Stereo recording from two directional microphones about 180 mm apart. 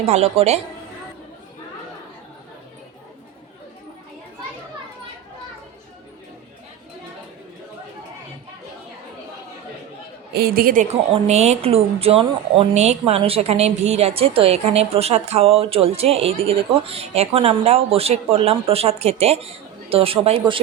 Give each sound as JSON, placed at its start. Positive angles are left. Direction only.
{"t": 0.0, "sound": "speech", "side_deg": -35}
{"t": 10.3, "sound": "a woman's voice", "side_deg": -55}
{"t": 11.1, "sound": "speech", "side_deg": -35}